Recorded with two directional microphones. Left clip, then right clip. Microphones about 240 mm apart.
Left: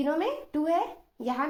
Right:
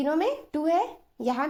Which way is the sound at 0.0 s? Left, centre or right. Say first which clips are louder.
Right 2 dB; right.